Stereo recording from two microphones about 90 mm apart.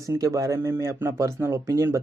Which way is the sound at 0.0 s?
40° right (ahead or behind).